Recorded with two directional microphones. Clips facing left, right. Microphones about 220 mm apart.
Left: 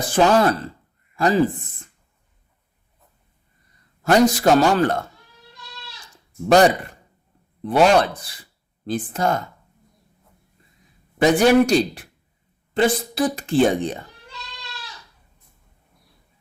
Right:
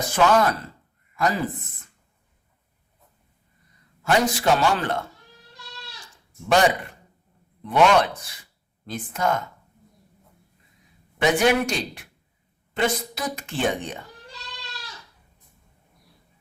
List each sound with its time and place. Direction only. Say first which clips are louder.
0.0 s a woman's voice: left 3 dB; 30° left (ahead or behind)
4.0 s a woman's voice: left 6 dB; 40° left (ahead or behind)
7.6 s a woman's voice: left 3 dB; 35° left (ahead or behind)
11.2 s a woman's voice: left 5 dB; 35° left (ahead or behind)